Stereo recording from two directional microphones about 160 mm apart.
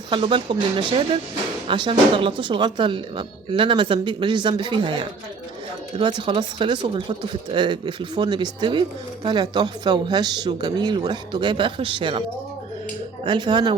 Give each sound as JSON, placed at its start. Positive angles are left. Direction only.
{"t": 0.1, "sound": "speech", "side_deg": -30}
{"t": 13.2, "sound": "speech", "side_deg": -30}